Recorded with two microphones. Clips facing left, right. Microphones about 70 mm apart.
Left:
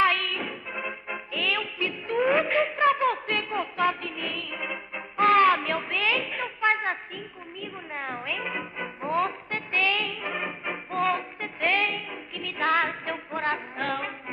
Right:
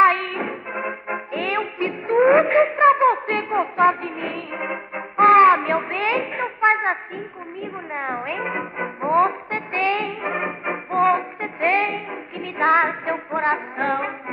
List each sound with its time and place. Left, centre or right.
0.0 s music: right